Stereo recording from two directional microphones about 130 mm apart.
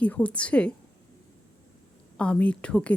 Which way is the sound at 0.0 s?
10° left (ahead or behind).